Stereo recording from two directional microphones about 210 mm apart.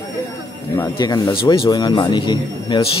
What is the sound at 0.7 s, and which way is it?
A man's voice, 15° left (ahead or behind).